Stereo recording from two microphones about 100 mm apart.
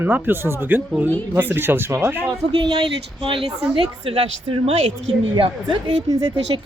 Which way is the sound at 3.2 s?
60° right (ahead or behind).